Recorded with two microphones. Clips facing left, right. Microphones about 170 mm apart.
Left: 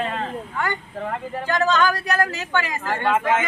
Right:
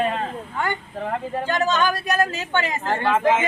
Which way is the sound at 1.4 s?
20° right (ahead or behind).